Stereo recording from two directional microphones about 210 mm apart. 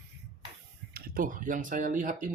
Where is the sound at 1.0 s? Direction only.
45° right (ahead or behind).